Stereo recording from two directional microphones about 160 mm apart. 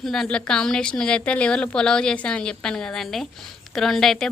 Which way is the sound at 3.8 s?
Centre (ahead or behind).